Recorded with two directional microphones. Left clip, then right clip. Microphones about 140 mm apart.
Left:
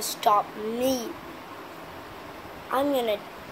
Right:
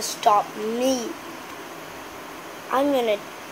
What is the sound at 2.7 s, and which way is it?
Speech, 15° right (ahead or behind).